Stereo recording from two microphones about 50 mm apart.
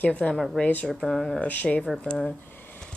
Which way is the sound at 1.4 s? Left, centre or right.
Left.